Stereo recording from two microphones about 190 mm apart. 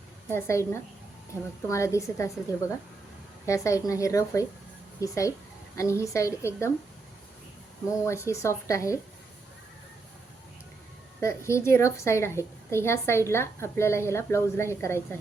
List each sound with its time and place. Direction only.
0.3 s a woman's voice: 15° left (ahead or behind)
8.0 s a woman's voice: 15° left (ahead or behind)
11.2 s a woman's voice: 15° left (ahead or behind)